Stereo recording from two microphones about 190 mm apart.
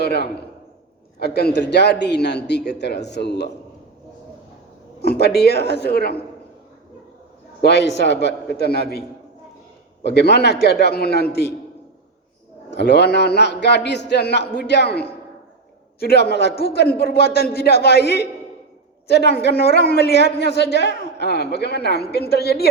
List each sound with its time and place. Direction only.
0.0 s a man's voice: 60° left (ahead or behind)
5.0 s a man's voice: 55° left (ahead or behind)
7.6 s a man's voice: 60° left (ahead or behind)
12.7 s a man's voice: 65° left (ahead or behind)